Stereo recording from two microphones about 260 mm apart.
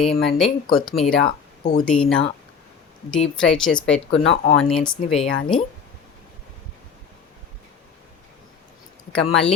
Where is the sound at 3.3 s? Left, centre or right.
Centre.